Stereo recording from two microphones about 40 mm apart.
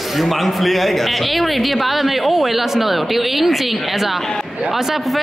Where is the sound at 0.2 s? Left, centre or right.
Centre.